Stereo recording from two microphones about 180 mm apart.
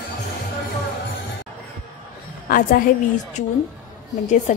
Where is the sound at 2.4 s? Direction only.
50° left (ahead or behind).